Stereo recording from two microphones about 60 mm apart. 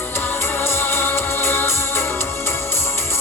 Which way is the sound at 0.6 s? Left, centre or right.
Left.